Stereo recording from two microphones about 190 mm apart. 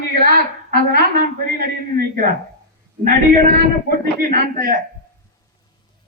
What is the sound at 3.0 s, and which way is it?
A man's voice, 45° right (ahead or behind).